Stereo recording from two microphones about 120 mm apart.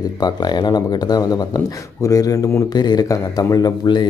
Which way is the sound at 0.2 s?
35° left (ahead or behind).